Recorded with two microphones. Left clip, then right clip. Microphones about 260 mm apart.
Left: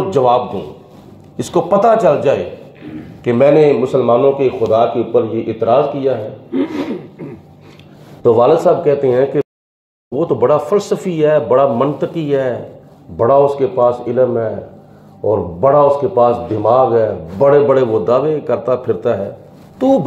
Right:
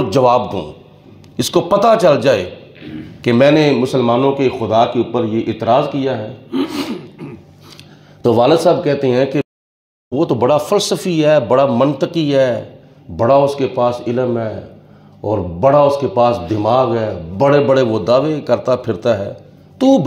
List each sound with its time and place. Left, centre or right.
0.1 s a man's voice: right
8.2 s speech: right
10.1 s speech: right
10.4 s speech: right
13.2 s a man's voice: right